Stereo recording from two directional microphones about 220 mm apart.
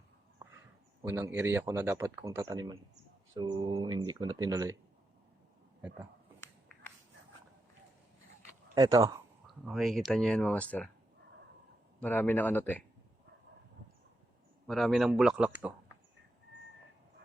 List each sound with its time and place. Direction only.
1.0 s speech: 10° right (ahead or behind)
8.7 s speech: 15° right (ahead or behind)
9.5 s speech: centre (ahead or behind)
11.9 s speech: 5° left (ahead or behind)
14.7 s speech: centre (ahead or behind)